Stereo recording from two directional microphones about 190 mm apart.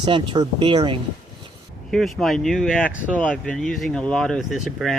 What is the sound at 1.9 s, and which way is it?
Speech, centre (ahead or behind).